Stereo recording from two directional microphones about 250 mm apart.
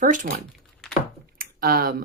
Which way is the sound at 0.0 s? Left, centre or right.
Right.